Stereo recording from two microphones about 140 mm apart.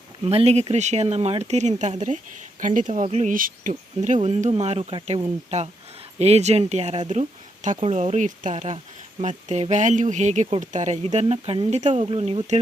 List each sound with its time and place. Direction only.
0.3 s speech: 45° right (ahead or behind)
5.5 s speech: 55° right (ahead or behind)